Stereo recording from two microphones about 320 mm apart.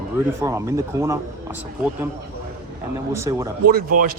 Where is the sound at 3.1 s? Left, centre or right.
Centre.